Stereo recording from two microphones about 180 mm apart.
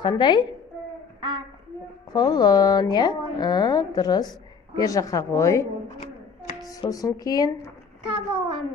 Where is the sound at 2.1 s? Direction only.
20° left (ahead or behind).